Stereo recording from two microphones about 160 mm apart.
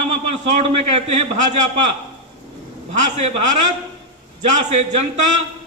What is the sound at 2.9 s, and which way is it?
A man's voice, 50° right (ahead or behind).